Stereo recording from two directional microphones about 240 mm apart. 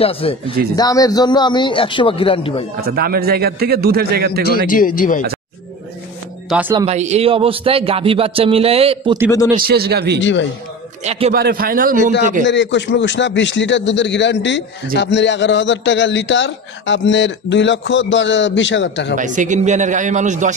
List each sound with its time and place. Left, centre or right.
0.0 s a man's voice: left
2.8 s a man's voice: right
4.5 s speech: left
6.5 s speech: centre
6.9 s a man's voice: right
9.6 s a man's voice: right
11.1 s a man's voice: right
11.3 s a man's voice: right
12.4 s a man's voice: left
19.1 s a man's voice: right